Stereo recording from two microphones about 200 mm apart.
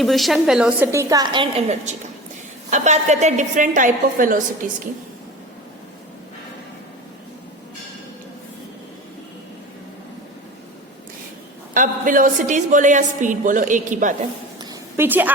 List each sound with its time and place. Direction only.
0.0 s a woman's voice: centre (ahead or behind)
0.9 s a woman's voice: 15° right (ahead or behind); by 4.8 s 40° right (ahead or behind)
11.7 s a woman's voice: 40° right (ahead or behind)
14.6 s a sound: 15° right (ahead or behind)